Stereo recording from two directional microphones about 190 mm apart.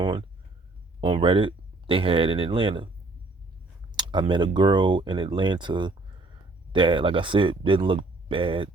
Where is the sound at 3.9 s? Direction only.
25° right (ahead or behind).